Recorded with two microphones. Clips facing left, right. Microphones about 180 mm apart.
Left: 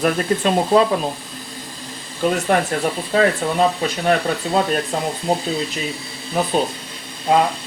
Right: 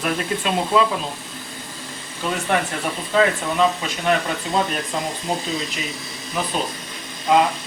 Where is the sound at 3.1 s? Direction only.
35° left (ahead or behind).